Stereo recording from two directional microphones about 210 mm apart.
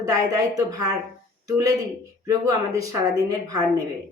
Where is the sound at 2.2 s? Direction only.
15° right (ahead or behind).